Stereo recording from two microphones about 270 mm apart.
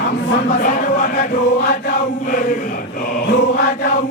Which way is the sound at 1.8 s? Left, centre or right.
Left.